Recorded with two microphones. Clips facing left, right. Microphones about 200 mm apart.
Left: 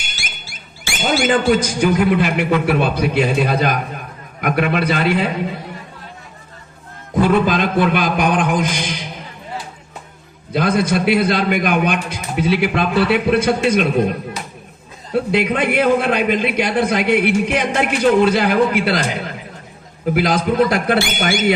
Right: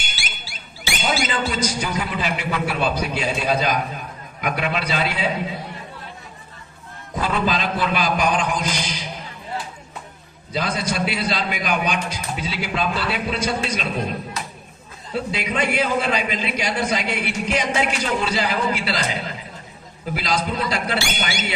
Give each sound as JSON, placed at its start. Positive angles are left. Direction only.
{"t": 0.2, "sound": "a man's voice", "side_deg": 45}
{"t": 7.2, "sound": "a man's voice", "side_deg": 55}
{"t": 10.5, "sound": "a man's voice", "side_deg": 55}
{"t": 15.1, "sound": "a man's voice", "side_deg": 60}